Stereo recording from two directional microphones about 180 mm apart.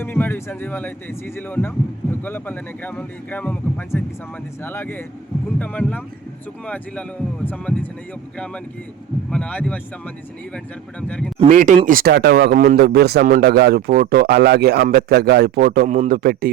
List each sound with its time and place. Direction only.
0.0 s speech: 10° left (ahead or behind)
7.4 s speech: 5° left (ahead or behind)
9.3 s speech: 5° left (ahead or behind)
11.3 s speech: 45° right (ahead or behind)
11.9 s a man's voice: 55° right (ahead or behind)